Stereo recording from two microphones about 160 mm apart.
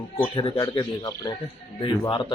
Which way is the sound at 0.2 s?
35° left (ahead or behind).